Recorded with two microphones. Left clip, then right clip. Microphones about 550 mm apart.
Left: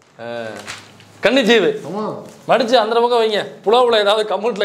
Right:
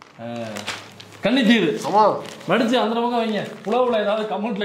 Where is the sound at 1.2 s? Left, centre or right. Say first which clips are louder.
Left 6 dB; left.